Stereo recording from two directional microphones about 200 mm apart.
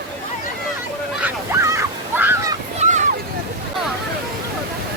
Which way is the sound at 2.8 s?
35° right (ahead or behind).